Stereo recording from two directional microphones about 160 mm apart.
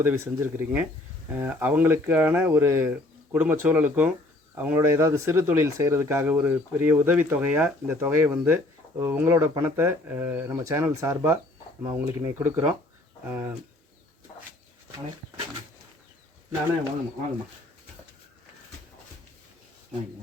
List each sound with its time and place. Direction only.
0.0 s speech: 15° right (ahead or behind)